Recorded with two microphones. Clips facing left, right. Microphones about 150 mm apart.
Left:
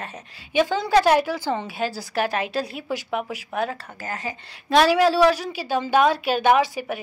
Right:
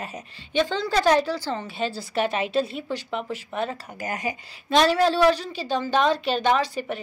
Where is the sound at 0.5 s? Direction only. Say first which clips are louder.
Left 4 dB; 10° left (ahead or behind).